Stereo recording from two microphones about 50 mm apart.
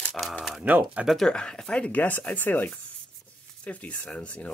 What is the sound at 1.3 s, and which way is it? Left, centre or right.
Speech, centre.